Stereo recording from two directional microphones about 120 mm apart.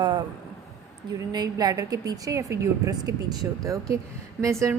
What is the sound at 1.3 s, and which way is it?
A woman's voice, 35° right (ahead or behind).